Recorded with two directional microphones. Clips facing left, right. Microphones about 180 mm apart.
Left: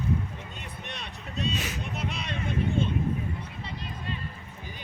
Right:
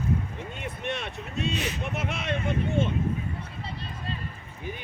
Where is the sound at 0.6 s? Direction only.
60° right (ahead or behind).